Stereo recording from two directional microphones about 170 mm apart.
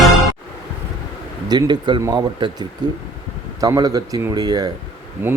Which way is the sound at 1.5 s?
25° right (ahead or behind).